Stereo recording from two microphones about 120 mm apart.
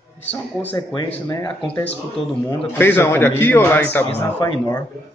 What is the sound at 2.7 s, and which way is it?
A man's voice, 15° left (ahead or behind).